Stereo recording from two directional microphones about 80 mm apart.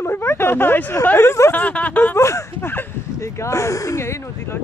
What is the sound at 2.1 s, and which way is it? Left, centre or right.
Speech, left.